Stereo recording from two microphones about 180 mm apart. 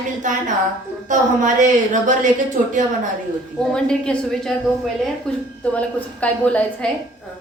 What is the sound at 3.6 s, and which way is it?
A man's voice, 5° left (ahead or behind).